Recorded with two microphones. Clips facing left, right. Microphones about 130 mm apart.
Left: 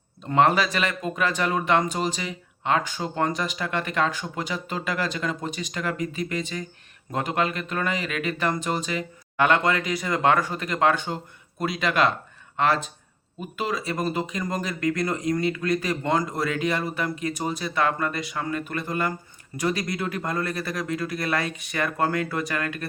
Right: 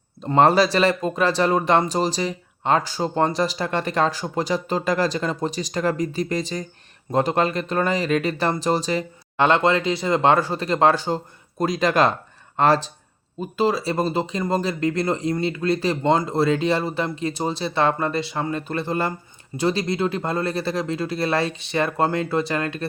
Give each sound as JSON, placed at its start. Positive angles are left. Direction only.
{"t": 0.2, "sound": "speech", "side_deg": -35}